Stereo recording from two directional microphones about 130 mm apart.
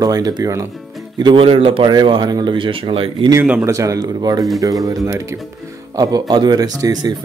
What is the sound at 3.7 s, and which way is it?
A man's voice, 25° right (ahead or behind).